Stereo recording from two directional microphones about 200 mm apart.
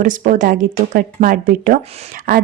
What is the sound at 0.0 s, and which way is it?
Speech, 40° right (ahead or behind).